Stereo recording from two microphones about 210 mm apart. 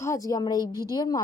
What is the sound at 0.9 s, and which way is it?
Speech, 20° left (ahead or behind).